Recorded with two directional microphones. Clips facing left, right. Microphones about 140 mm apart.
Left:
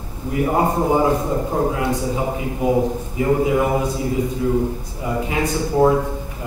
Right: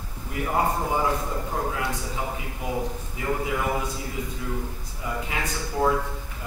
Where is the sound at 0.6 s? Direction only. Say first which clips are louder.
Left 6 dB; 30° left (ahead or behind).